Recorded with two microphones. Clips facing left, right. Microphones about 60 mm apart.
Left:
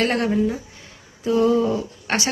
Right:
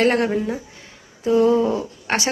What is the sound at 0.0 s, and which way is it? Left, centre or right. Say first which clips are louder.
Speech: right 3 dB; right.